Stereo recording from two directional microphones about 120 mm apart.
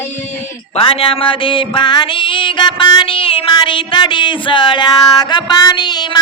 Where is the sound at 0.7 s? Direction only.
50° left (ahead or behind).